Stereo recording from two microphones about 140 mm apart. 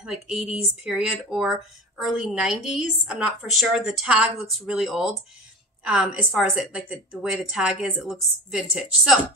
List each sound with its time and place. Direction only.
0.0 s a woman's voice: 5° right (ahead or behind)